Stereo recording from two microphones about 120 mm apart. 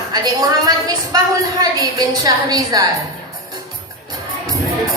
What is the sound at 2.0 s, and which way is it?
Speech, 30° right (ahead or behind).